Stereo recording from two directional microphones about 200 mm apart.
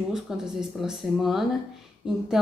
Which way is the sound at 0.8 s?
Centre (ahead or behind).